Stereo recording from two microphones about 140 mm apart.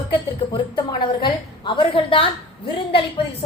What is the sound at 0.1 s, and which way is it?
A woman's voice, 35° left (ahead or behind).